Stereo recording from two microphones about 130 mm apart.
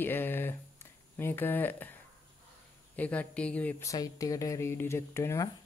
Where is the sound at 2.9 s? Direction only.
10° left (ahead or behind).